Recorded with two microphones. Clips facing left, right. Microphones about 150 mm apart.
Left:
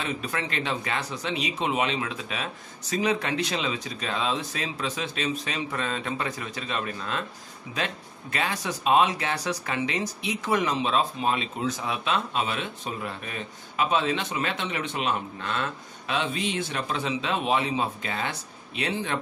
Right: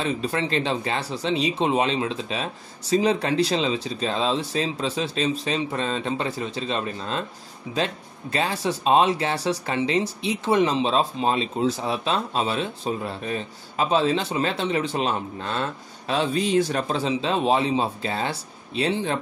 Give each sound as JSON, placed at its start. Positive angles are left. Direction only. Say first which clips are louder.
{"t": 0.0, "sound": "speech", "louder": "right 6 dB", "side_deg": -30}